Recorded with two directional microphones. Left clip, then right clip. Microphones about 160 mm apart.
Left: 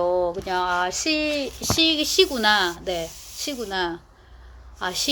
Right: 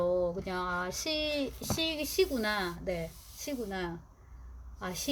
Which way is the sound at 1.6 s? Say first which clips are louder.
Left 13 dB; 15° right (ahead or behind).